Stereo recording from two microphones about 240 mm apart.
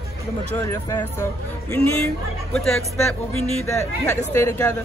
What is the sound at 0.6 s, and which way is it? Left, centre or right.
Speech, centre.